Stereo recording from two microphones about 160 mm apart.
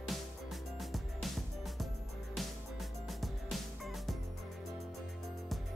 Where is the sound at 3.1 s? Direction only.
Centre (ahead or behind).